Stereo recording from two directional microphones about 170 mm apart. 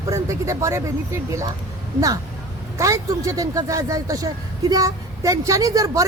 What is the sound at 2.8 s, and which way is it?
Speech, 20° right (ahead or behind).